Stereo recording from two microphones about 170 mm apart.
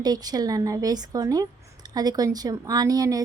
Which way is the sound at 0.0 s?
25° right (ahead or behind).